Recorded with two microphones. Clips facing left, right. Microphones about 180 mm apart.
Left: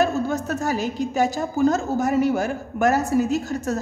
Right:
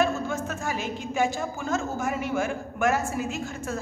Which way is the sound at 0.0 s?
40° left (ahead or behind).